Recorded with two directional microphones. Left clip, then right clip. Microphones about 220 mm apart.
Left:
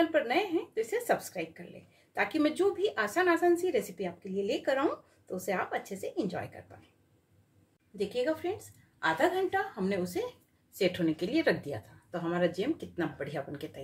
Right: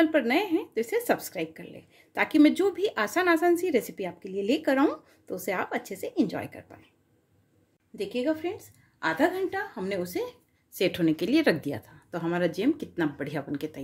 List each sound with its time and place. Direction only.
0.1 s a woman's voice: 40° right (ahead or behind)
7.9 s speech: 35° right (ahead or behind)